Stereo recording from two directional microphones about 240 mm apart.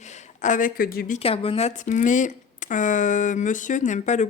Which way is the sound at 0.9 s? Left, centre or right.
Left.